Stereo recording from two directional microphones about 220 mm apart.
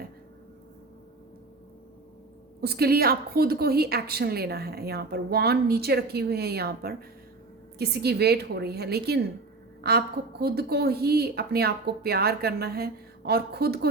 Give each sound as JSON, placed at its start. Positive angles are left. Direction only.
{"t": 2.6, "sound": "a woman's voice", "side_deg": -45}
{"t": 10.4, "sound": "a woman's voice", "side_deg": -45}